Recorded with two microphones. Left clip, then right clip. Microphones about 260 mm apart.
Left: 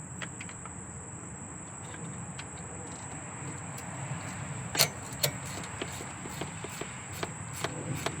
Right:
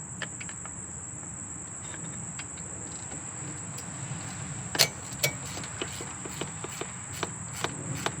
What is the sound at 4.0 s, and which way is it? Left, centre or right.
Vehicle, left.